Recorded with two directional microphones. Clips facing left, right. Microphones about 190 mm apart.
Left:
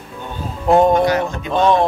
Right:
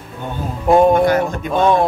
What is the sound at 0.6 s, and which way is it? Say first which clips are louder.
Speech: right 1 dB; 10° right (ahead or behind).